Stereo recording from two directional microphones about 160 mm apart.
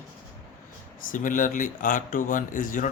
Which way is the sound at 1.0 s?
55° left (ahead or behind).